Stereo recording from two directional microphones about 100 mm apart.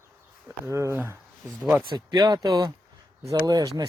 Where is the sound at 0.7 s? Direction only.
30° right (ahead or behind).